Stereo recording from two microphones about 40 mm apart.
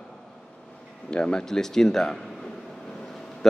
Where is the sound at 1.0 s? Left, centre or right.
Left.